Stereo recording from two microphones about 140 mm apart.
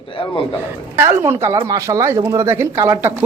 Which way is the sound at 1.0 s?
15° right (ahead or behind).